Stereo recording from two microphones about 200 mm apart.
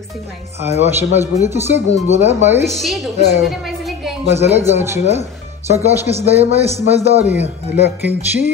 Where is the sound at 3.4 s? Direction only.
Centre (ahead or behind).